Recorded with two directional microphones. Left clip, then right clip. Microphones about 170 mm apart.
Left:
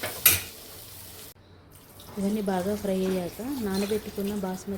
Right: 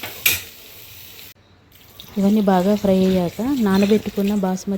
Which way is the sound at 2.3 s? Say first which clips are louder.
Right 11 dB; 50° right (ahead or behind).